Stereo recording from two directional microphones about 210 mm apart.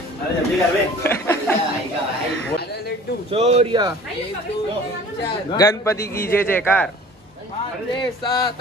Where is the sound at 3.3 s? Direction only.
30° right (ahead or behind).